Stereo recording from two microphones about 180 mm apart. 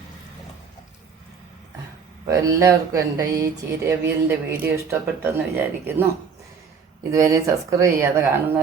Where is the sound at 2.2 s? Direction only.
20° right (ahead or behind).